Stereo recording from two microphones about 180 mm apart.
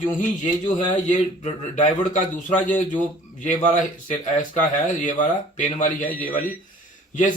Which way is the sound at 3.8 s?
45° left (ahead or behind).